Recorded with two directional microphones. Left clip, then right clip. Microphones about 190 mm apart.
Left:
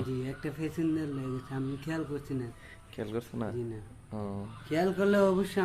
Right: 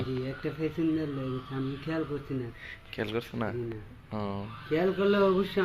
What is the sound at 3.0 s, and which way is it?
Speech, 10° left (ahead or behind).